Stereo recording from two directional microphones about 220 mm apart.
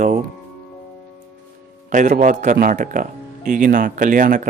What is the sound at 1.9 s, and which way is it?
Speech, 35° right (ahead or behind).